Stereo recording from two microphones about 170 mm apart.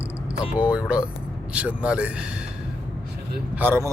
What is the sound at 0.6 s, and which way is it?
A man's voice, 5° right (ahead or behind).